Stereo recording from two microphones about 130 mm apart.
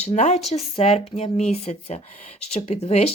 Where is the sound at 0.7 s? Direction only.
50° left (ahead or behind).